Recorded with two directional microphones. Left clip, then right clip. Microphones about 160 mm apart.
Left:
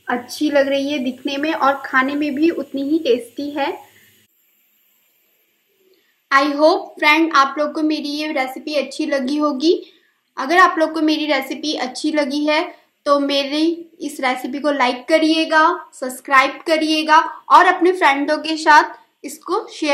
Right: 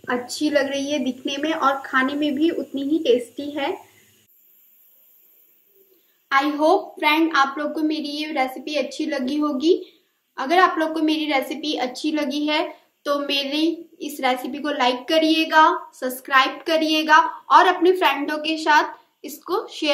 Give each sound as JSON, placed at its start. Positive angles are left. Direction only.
{"t": 0.0, "sound": "a woman's voice", "side_deg": 35}
{"t": 6.2, "sound": "a woman's voice", "side_deg": 40}